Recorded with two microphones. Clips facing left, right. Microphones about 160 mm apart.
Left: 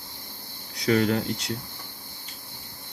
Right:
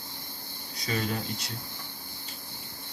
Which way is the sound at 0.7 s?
70° left (ahead or behind).